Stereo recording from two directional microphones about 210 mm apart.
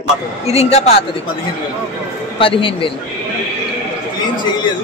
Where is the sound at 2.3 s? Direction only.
25° left (ahead or behind).